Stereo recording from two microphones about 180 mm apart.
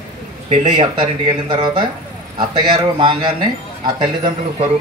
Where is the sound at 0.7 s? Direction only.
25° right (ahead or behind).